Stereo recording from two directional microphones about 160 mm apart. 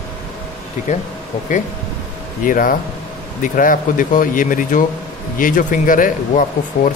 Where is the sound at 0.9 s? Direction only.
45° left (ahead or behind).